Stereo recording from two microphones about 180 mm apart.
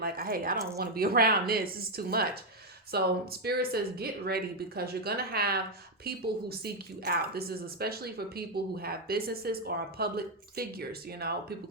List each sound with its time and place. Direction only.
0.0 s speech: 55° right (ahead or behind)